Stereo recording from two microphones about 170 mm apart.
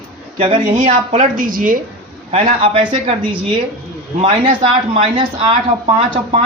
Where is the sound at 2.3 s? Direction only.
30° right (ahead or behind).